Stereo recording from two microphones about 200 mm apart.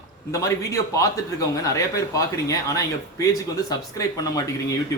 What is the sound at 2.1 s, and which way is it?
Speech, 15° left (ahead or behind).